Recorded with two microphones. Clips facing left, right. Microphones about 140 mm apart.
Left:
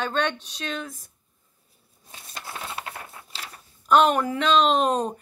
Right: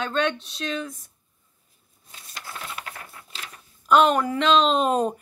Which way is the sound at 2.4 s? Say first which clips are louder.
Left 2 dB; 30° left (ahead or behind).